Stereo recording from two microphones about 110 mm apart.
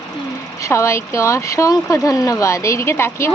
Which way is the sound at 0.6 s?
25° left (ahead or behind).